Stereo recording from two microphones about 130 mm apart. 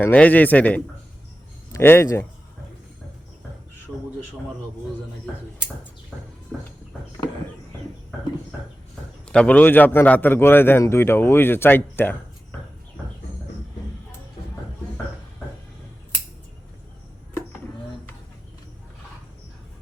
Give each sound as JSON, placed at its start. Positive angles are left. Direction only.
{"t": 0.0, "sound": "a man's voice", "side_deg": 15}
{"t": 9.2, "sound": "a man's voice", "side_deg": 5}